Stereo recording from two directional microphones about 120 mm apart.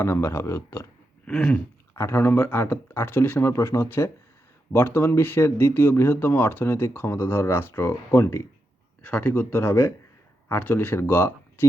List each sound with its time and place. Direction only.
0.0 s speech: 20° left (ahead or behind)
1.3 s a sound: 5° left (ahead or behind)
1.9 s speech: 20° left (ahead or behind)